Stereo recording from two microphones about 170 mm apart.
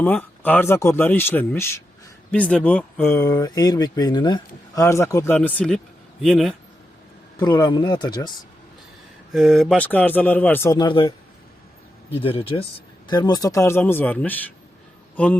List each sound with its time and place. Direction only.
0.0 s speech: 10° left (ahead or behind)
7.3 s speech: 25° left (ahead or behind)
9.3 s speech: centre (ahead or behind); by 11.1 s 25° left (ahead or behind)
12.2 s speech: 35° left (ahead or behind); by 15.4 s 10° left (ahead or behind)